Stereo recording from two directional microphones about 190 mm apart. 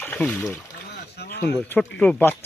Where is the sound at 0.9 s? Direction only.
60° left (ahead or behind).